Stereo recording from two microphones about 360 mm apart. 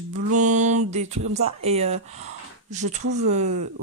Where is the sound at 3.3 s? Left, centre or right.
Centre.